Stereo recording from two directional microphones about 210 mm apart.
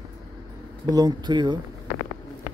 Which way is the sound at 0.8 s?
20° right (ahead or behind).